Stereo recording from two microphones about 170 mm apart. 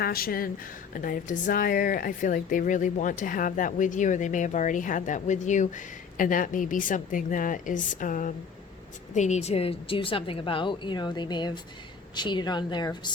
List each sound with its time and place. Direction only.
0.0 s a woman's voice: 60° left (ahead or behind); by 13.1 s 25° left (ahead or behind)